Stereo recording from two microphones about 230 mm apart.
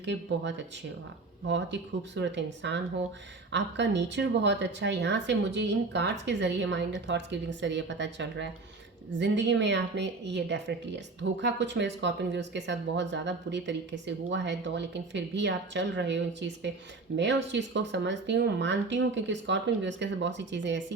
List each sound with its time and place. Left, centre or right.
0.0 s a woman's voice: right
2.1 s a woman's voice: right